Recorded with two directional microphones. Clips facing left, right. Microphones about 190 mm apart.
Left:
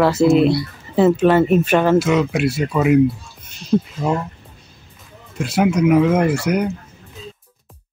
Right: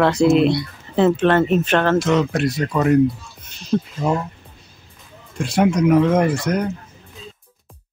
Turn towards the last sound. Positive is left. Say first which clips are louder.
# left 2 dB
turn(degrees=10)  # may be behind; listen again after turning